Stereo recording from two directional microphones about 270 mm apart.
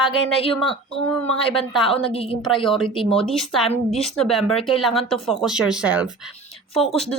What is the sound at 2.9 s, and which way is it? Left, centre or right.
Speech, centre.